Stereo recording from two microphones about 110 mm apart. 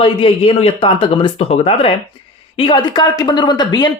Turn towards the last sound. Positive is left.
turn(degrees=40)  # may be behind; listen again after turning